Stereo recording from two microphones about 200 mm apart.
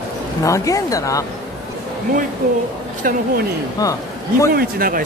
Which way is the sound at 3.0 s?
45° right (ahead or behind).